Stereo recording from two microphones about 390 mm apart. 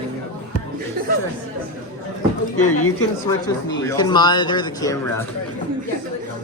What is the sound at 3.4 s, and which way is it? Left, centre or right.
Speech, centre.